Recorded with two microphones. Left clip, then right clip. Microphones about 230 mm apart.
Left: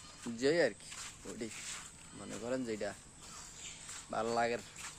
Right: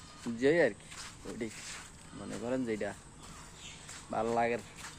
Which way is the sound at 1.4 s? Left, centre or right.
Centre.